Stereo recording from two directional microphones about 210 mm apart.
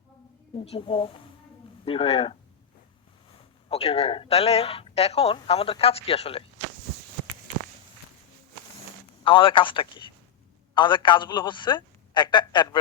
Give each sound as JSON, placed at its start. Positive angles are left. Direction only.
{"t": 0.6, "sound": "speech", "side_deg": 25}
{"t": 3.7, "sound": "speech", "side_deg": 30}
{"t": 9.2, "sound": "speech", "side_deg": 25}